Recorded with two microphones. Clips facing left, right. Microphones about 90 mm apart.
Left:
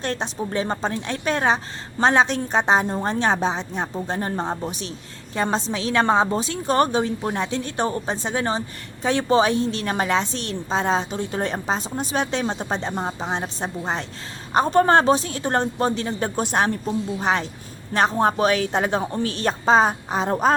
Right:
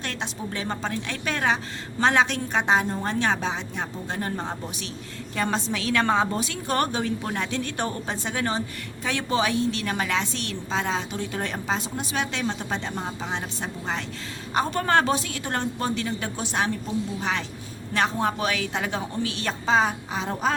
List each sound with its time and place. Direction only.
0.0 s a woman's voice: 35° left (ahead or behind)
16.4 s a woman's voice: 45° left (ahead or behind)